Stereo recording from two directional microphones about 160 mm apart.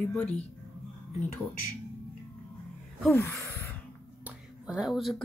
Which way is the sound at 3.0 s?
10° left (ahead or behind).